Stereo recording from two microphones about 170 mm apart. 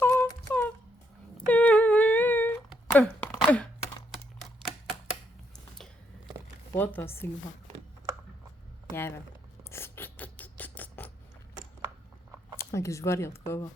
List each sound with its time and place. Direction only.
0.0 s a sound: 10° left (ahead or behind)
1.5 s humming: 10° left (ahead or behind)
2.9 s throat clearing: 10° left (ahead or behind)
4.1 s typewriter: centre (ahead or behind)
6.7 s speech: 10° left (ahead or behind)
9.0 s speech: 15° left (ahead or behind)
9.6 s rodents: 15° left (ahead or behind)
12.7 s speech: 15° left (ahead or behind)